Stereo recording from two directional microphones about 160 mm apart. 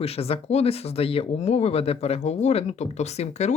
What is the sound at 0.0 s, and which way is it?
Speech, 40° left (ahead or behind).